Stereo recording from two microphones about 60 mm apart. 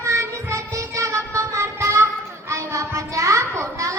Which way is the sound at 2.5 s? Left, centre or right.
Right.